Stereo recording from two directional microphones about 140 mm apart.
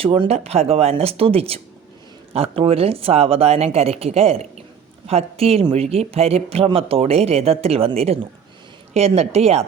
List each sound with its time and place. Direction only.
0.0 s speech: 45° right (ahead or behind)